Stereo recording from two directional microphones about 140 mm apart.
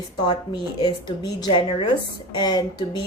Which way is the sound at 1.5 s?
35° left (ahead or behind).